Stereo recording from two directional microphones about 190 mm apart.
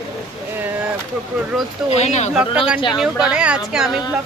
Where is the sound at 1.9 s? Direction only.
35° left (ahead or behind).